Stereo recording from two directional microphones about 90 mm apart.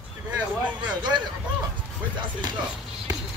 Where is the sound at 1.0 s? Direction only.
55° right (ahead or behind).